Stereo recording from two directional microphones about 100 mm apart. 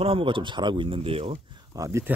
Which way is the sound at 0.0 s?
65° right (ahead or behind).